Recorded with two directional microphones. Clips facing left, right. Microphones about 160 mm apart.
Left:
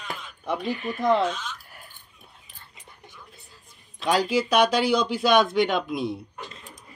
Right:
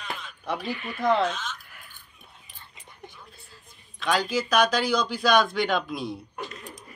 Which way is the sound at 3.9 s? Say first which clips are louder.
Left 3 dB; 30° left (ahead or behind).